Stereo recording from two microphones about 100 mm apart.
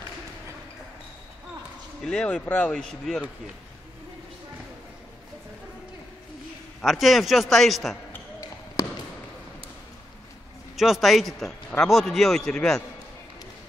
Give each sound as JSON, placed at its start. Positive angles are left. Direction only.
{"t": 2.0, "sound": "speech", "side_deg": 10}
{"t": 6.8, "sound": "a man's voice", "side_deg": 0}
{"t": 8.8, "sound": "basketball bounce", "side_deg": 35}
{"t": 10.8, "sound": "a man's voice", "side_deg": 0}